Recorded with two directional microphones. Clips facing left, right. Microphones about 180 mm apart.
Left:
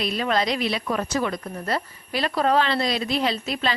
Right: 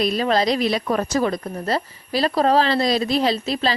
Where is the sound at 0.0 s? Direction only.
40° right (ahead or behind).